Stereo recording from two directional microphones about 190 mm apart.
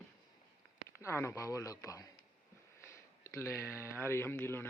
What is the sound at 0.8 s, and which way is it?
Speech, 15° left (ahead or behind).